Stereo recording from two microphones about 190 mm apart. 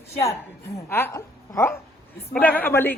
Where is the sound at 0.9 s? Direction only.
10° left (ahead or behind).